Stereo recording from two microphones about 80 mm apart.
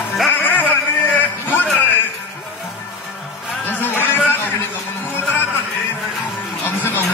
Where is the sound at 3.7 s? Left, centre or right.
Left.